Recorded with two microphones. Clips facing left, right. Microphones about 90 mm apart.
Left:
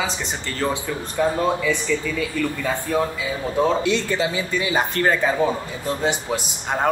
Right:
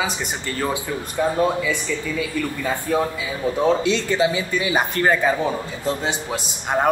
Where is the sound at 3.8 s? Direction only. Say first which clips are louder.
Right 2 dB; 20° right (ahead or behind).